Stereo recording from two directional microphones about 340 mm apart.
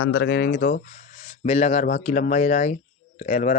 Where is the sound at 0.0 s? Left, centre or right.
Left.